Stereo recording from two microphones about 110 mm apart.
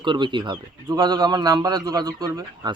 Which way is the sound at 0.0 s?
45° right (ahead or behind).